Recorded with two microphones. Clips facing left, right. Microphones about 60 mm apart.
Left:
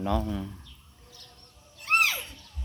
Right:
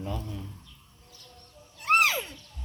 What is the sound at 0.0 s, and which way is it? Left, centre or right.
Speech, left.